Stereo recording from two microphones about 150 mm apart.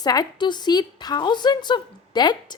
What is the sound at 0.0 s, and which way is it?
A woman's voice, 25° left (ahead or behind).